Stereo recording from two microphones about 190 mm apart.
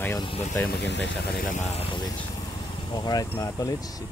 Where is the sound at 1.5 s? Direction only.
40° left (ahead or behind).